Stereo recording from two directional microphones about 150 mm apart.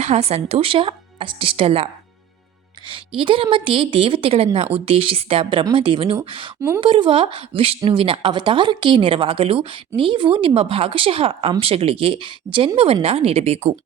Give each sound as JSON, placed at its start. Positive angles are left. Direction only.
{"t": 0.0, "sound": "speech", "side_deg": -45}
{"t": 6.6, "sound": "a woman's voice", "side_deg": -15}
{"t": 6.8, "sound": "speech", "side_deg": -35}